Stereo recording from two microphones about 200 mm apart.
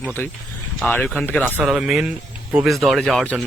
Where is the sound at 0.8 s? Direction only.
5° left (ahead or behind).